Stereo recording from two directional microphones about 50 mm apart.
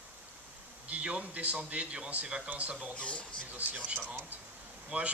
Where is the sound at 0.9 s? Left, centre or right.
Right.